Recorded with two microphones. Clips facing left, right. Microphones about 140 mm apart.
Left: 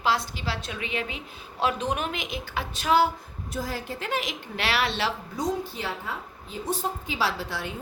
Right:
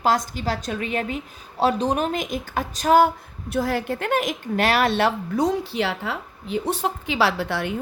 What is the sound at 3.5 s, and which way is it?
A woman's voice, 65° right (ahead or behind).